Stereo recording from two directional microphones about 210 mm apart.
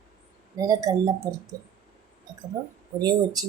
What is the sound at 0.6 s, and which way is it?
Speech, 15° right (ahead or behind).